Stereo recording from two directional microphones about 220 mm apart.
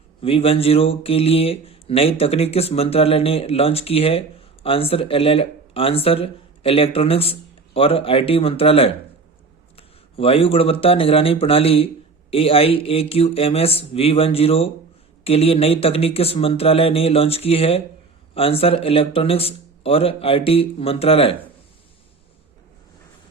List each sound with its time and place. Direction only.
0.2 s speech: 25° left (ahead or behind)